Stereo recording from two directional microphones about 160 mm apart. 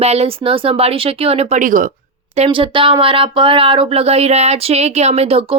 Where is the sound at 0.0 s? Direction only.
40° right (ahead or behind).